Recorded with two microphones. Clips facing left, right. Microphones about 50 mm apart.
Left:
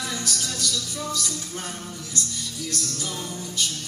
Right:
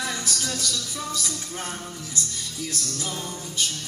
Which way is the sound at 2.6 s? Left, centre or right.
Centre.